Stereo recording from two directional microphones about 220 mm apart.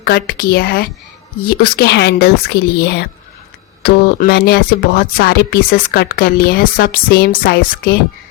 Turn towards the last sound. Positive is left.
turn(degrees=45)  # may be behind; listen again after turning